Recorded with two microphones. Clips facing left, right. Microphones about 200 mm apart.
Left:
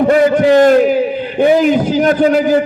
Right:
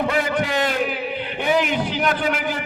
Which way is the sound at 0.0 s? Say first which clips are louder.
Left 12 dB; 45° left (ahead or behind).